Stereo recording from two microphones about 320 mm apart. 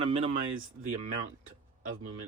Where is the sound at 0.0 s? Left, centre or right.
Centre.